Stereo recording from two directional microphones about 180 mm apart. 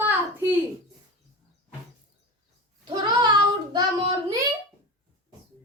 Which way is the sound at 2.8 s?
25° right (ahead or behind).